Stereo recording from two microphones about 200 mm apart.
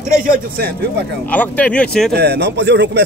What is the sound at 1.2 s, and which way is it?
Speech, 10° left (ahead or behind).